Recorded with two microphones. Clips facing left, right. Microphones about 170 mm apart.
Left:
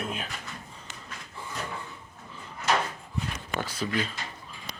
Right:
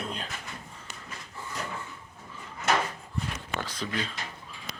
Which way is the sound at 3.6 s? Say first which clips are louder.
Left 5 dB; 10° left (ahead or behind).